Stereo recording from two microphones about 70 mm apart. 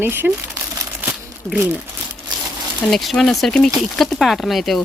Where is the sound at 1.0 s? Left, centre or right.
Right.